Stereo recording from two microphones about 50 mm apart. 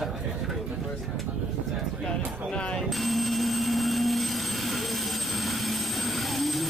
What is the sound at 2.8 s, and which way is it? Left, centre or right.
Vehicle, centre.